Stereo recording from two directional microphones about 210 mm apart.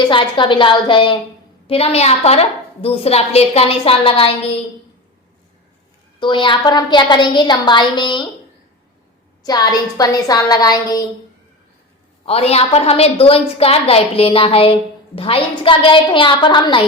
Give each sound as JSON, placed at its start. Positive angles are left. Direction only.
{"t": 0.1, "sound": "a woman's voice", "side_deg": 25}
{"t": 6.1, "sound": "a woman's voice", "side_deg": 25}
{"t": 9.4, "sound": "a woman's voice", "side_deg": 20}
{"t": 12.2, "sound": "a woman's voice", "side_deg": 30}